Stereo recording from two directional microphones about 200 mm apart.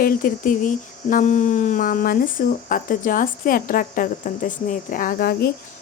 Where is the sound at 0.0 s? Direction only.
45° left (ahead or behind).